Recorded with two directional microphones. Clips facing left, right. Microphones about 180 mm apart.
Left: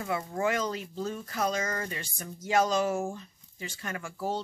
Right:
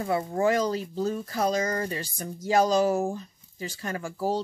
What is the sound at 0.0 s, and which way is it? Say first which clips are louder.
Speech: right 5 dB; 35° right (ahead or behind).